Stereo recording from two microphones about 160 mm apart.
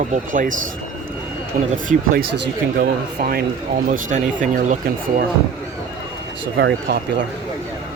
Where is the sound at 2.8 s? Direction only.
65° right (ahead or behind).